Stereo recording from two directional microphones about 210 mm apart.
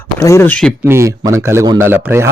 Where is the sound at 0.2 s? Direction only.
15° left (ahead or behind).